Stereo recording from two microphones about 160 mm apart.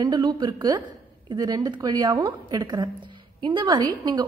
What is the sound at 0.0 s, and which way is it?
A woman's voice, 25° right (ahead or behind).